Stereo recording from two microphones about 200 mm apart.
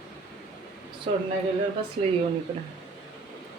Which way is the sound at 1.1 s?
25° right (ahead or behind).